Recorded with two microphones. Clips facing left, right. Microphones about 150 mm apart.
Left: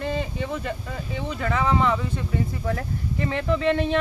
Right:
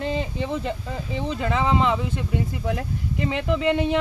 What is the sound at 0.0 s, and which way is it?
Speech, 15° right (ahead or behind).